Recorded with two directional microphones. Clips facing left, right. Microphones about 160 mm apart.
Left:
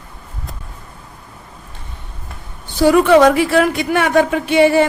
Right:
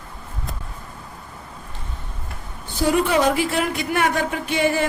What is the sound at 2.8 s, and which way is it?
Speech, 75° left (ahead or behind).